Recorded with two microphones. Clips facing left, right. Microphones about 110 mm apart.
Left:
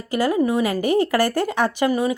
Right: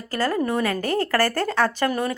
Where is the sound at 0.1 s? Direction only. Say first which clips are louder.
Left 4 dB; 15° left (ahead or behind).